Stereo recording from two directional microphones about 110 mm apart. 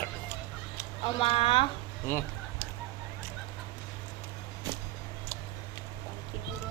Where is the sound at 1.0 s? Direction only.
60° left (ahead or behind).